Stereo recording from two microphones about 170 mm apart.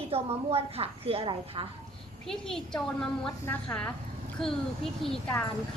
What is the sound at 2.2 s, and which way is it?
A woman's voice, 5° left (ahead or behind).